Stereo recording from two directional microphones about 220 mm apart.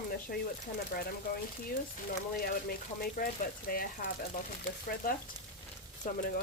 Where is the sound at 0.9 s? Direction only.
45° left (ahead or behind).